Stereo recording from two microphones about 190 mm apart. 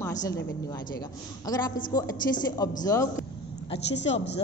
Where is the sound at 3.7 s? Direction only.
35° left (ahead or behind).